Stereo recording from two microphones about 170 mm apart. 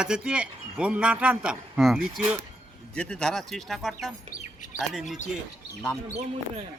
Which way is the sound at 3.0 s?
5° left (ahead or behind).